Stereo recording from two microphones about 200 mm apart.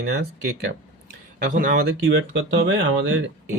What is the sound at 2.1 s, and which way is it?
Speech, 70° right (ahead or behind).